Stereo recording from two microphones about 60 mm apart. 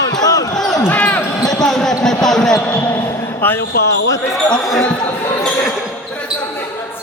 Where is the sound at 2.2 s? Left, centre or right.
Centre.